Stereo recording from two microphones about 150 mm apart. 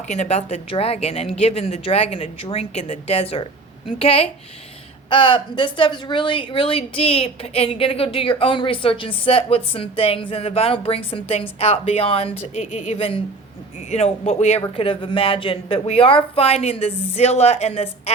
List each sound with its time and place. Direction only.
0.1 s a woman's voice: 45° left (ahead or behind)